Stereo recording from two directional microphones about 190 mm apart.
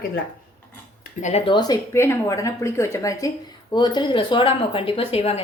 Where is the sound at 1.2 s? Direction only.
35° left (ahead or behind).